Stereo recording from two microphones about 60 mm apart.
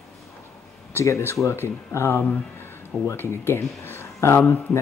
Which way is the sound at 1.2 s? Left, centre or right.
Left.